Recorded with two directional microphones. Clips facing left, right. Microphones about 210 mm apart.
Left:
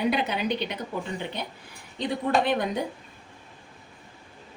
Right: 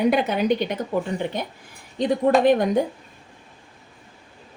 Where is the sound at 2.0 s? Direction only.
45° right (ahead or behind).